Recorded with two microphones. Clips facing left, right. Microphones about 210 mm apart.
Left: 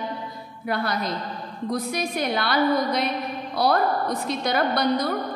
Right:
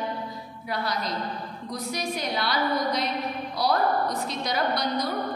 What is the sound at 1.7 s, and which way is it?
A woman's voice, 55° left (ahead or behind).